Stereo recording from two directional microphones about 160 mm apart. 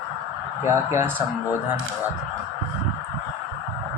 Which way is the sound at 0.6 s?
15° right (ahead or behind).